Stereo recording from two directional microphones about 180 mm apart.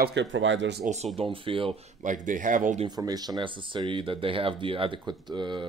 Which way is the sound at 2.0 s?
45° right (ahead or behind).